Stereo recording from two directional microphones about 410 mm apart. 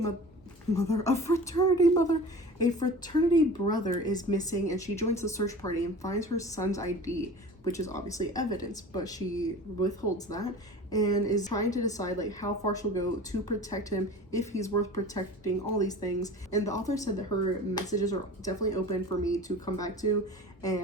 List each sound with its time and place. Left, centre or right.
0.7 s speech: centre